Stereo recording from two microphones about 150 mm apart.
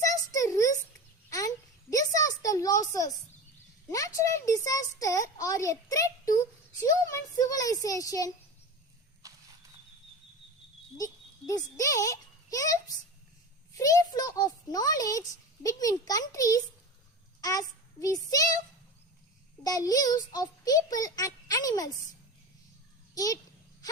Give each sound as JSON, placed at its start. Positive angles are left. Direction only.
{"t": 0.3, "sound": "a sound", "side_deg": 20}
{"t": 3.8, "sound": "a child's voice", "side_deg": 20}
{"t": 9.2, "sound": "walk", "side_deg": -20}
{"t": 10.9, "sound": "a child's voice", "side_deg": 25}
{"t": 19.6, "sound": "a child's voice", "side_deg": 25}
{"t": 23.1, "sound": "a child's voice", "side_deg": 25}